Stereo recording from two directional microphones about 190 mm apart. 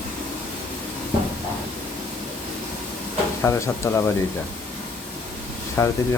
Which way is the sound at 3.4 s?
15° left (ahead or behind).